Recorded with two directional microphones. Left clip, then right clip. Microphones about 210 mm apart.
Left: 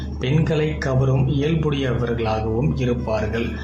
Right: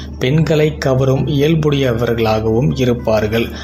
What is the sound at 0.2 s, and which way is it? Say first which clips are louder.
Speech: right 8 dB; 30° right (ahead or behind).